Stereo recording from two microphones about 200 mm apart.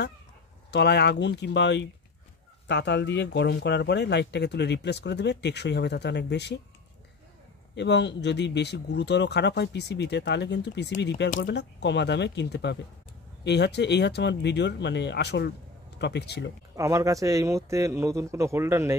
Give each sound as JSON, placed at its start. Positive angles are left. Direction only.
{"t": 0.7, "sound": "speech", "side_deg": 55}
{"t": 7.7, "sound": "speech", "side_deg": 60}
{"t": 16.7, "sound": "a man's voice", "side_deg": -15}